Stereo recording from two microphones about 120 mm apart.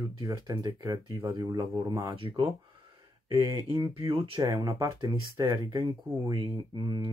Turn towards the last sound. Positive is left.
turn(degrees=-40)  # may be behind; listen again after turning